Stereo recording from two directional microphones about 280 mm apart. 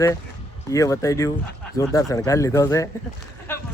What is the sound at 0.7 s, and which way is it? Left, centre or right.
Speech, centre.